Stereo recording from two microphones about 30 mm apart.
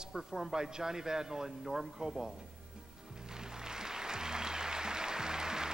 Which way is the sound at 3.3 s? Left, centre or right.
Right.